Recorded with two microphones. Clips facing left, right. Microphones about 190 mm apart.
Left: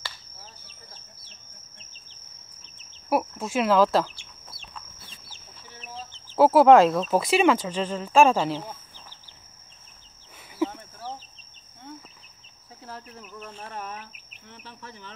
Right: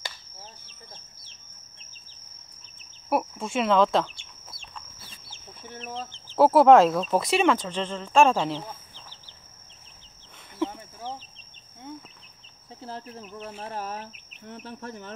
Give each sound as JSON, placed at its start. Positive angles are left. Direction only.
{"t": 3.1, "sound": "chicken", "side_deg": 0}
{"t": 6.3, "sound": "speech", "side_deg": 0}
{"t": 10.6, "sound": "a sound", "side_deg": 5}
{"t": 12.8, "sound": "insect", "side_deg": -30}
{"t": 14.4, "sound": "insect", "side_deg": -45}